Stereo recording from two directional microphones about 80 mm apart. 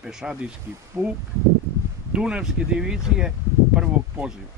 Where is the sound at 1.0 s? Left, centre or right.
Right.